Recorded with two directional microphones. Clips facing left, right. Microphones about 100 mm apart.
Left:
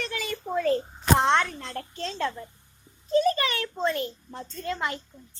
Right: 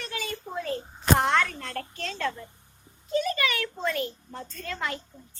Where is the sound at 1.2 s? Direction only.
25° left (ahead or behind).